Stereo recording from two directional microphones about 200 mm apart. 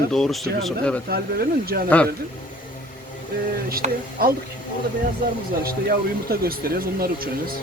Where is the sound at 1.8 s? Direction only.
10° left (ahead or behind).